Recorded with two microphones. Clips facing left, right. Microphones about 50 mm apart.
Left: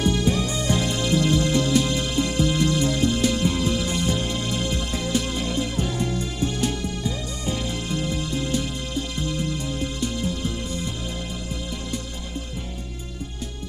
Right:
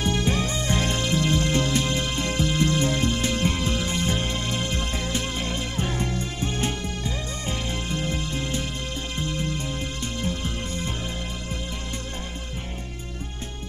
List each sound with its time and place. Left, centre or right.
0.0 s music: right